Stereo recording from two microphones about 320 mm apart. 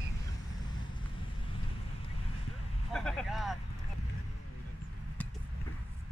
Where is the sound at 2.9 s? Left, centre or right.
Centre.